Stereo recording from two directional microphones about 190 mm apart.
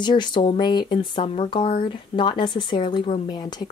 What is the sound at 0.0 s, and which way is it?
A woman's voice, 25° left (ahead or behind).